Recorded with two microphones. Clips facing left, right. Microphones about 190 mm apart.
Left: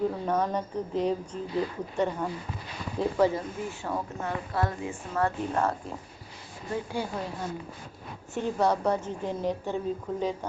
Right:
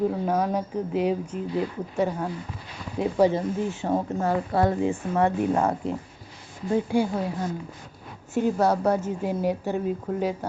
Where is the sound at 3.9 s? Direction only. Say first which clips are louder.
Right 9 dB; 35° right (ahead or behind).